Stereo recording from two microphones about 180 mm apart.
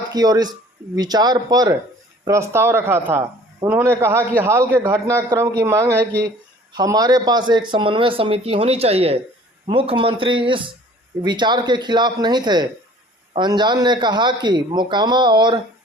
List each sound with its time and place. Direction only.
0.1 s a man's voice: 20° right (ahead or behind)